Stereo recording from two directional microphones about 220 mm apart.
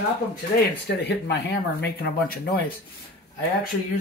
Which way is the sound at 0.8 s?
50° left (ahead or behind).